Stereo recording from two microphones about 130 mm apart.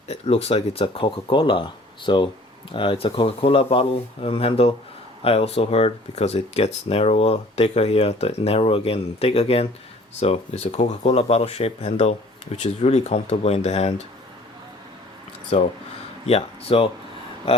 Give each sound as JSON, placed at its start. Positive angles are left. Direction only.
{"t": 0.1, "sound": "speech", "side_deg": 55}
{"t": 15.5, "sound": "speech", "side_deg": 55}